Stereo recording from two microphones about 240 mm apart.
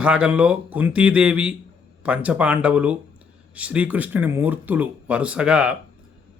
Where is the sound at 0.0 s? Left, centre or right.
Centre.